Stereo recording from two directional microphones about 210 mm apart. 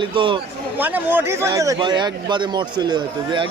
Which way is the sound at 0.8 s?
10° right (ahead or behind).